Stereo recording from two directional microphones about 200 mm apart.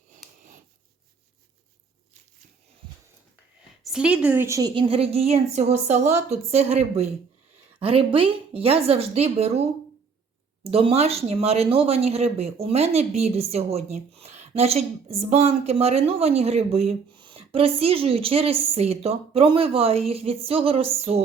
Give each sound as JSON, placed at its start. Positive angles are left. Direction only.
{"t": 3.8, "sound": "a woman's voice", "side_deg": -5}